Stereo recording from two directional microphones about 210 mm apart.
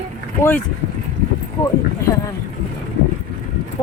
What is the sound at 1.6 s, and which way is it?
Speech, 15° left (ahead or behind).